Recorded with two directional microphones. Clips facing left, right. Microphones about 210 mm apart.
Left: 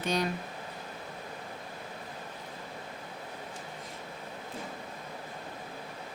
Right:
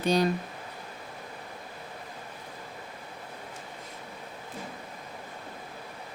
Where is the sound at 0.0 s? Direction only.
35° right (ahead or behind).